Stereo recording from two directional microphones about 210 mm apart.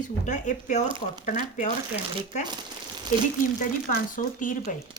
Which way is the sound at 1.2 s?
35° left (ahead or behind).